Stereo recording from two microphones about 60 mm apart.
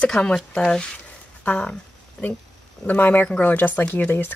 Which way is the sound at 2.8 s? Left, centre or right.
Left.